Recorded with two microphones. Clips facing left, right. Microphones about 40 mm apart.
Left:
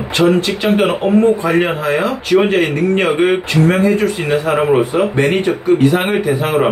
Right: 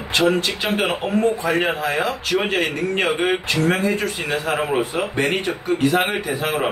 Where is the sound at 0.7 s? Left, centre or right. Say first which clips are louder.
Left 10 dB; centre.